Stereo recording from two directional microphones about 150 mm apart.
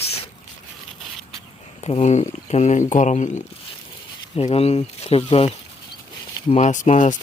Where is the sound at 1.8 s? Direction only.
45° left (ahead or behind).